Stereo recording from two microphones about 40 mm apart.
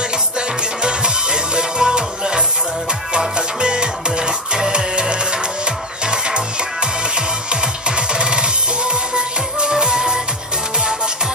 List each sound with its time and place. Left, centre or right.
0.8 s music: right
8.1 s music: right